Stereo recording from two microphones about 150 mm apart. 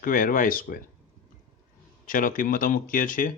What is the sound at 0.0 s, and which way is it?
Speech, 70° left (ahead or behind).